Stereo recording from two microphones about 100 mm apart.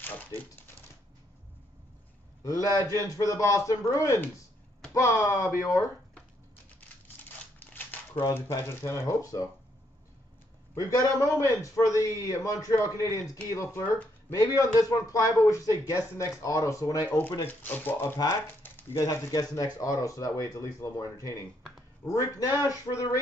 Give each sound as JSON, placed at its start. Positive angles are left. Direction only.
{"t": 2.4, "sound": "a man's voice", "side_deg": 35}
{"t": 7.2, "sound": "scissors", "side_deg": 20}
{"t": 8.4, "sound": "a man's voice", "side_deg": 25}
{"t": 10.7, "sound": "a man's voice", "side_deg": 35}
{"t": 18.6, "sound": "a sound", "side_deg": 25}
{"t": 19.0, "sound": "a man's voice", "side_deg": 35}